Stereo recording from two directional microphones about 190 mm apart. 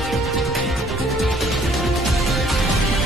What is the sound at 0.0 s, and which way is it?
Music, centre (ahead or behind).